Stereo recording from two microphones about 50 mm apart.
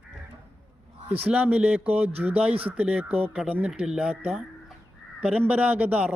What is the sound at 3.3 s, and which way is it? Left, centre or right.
A man's voice, right.